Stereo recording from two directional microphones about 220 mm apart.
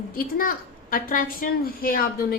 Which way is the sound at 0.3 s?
40° left (ahead or behind).